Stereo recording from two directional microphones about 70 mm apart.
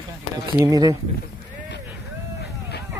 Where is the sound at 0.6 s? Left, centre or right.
Right.